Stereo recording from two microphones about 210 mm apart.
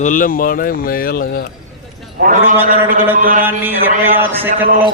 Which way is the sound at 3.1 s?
40° right (ahead or behind).